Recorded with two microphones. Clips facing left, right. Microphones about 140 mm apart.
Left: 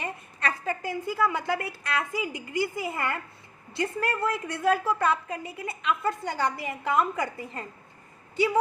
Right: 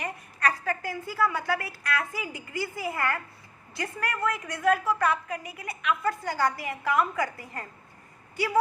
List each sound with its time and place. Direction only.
0.0 s a woman's voice: 25° left (ahead or behind)